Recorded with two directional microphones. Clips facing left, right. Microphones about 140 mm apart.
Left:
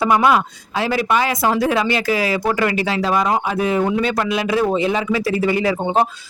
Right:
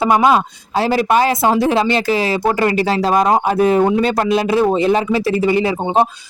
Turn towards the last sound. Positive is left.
turn(degrees=-25)  # may be behind; listen again after turning